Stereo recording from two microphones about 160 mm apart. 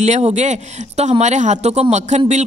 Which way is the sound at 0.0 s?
45° right (ahead or behind).